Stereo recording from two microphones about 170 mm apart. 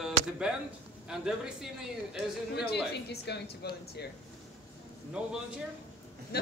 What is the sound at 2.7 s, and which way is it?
Speech, 75° left (ahead or behind).